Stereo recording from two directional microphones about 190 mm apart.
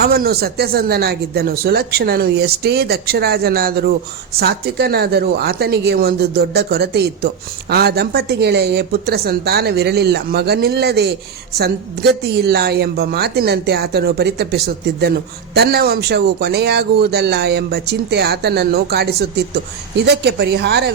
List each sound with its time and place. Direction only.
0.0 s speech: 55° right (ahead or behind)